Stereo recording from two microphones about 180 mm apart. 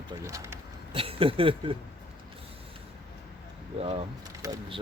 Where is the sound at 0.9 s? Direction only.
30° right (ahead or behind).